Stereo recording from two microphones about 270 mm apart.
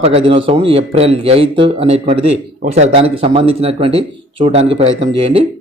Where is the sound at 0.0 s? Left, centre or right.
Right.